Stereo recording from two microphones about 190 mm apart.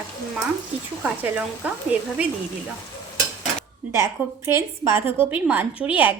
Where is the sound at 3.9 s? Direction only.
15° right (ahead or behind).